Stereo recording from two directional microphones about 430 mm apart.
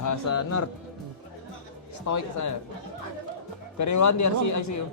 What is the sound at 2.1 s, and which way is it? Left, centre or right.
Speech, left.